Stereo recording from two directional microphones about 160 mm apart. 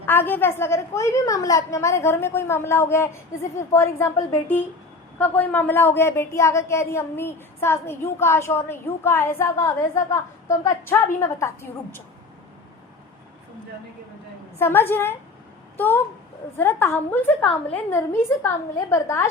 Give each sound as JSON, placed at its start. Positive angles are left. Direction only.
{"t": 0.0, "sound": "a woman's voice", "side_deg": 15}
{"t": 14.6, "sound": "a woman's voice", "side_deg": 15}